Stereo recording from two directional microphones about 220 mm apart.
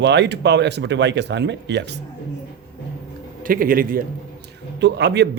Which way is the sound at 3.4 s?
40° right (ahead or behind).